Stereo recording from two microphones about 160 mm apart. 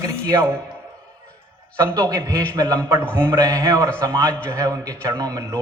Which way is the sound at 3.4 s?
20° right (ahead or behind).